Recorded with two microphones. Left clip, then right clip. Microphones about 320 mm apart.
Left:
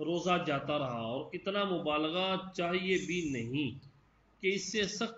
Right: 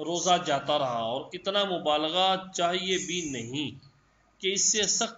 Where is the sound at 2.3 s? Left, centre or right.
Right.